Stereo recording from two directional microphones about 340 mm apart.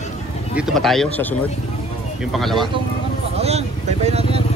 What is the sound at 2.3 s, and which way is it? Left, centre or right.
Speech, centre.